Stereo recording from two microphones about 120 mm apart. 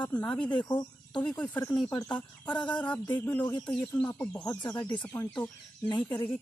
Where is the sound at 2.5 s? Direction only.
40° left (ahead or behind).